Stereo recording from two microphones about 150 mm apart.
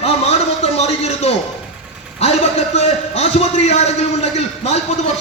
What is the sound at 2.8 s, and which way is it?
A man's voice, 45° left (ahead or behind).